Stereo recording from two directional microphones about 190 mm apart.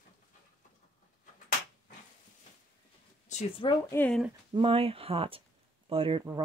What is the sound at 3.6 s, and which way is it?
Speech, 25° left (ahead or behind).